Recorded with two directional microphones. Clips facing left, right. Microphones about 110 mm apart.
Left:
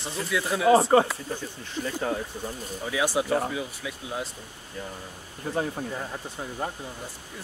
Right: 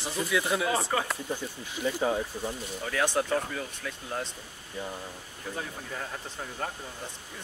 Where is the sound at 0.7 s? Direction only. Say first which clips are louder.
Left 10 dB; 30° left (ahead or behind).